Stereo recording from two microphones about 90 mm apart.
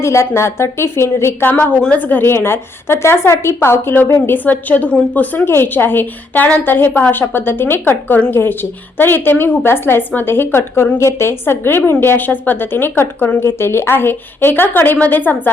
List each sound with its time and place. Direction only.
0.0 s a woman's voice: 35° left (ahead or behind)
1.5 s a woman's voice: 15° left (ahead or behind)